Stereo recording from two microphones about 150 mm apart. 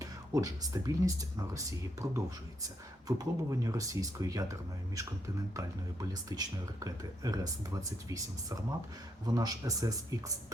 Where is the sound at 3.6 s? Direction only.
20° right (ahead or behind).